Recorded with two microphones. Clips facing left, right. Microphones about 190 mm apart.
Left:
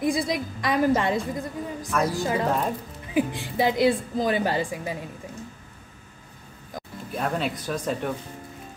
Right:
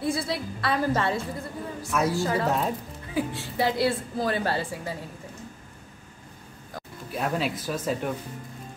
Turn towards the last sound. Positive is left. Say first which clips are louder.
# left 1 dB
turn(degrees=-5)  # may be behind; listen again after turning